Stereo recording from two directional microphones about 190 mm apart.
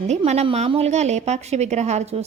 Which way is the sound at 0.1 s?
35° right (ahead or behind).